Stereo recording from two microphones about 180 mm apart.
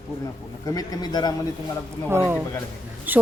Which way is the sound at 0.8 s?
20° left (ahead or behind).